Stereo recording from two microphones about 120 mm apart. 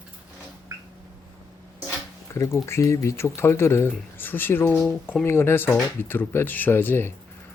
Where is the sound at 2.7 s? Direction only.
25° left (ahead or behind).